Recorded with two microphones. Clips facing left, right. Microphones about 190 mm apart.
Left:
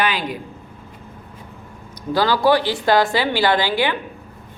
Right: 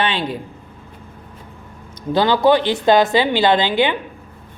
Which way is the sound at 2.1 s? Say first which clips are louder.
Right 2 dB; 20° right (ahead or behind).